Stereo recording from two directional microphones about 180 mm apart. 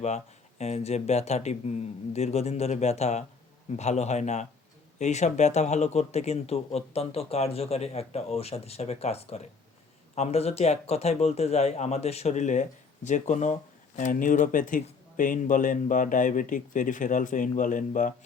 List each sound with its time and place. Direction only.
0.6 s speech: 35° left (ahead or behind)